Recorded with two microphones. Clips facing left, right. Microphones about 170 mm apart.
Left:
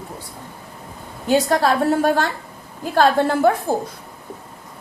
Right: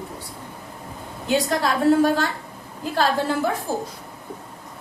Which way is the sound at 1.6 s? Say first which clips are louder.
Even; 60° left (ahead or behind).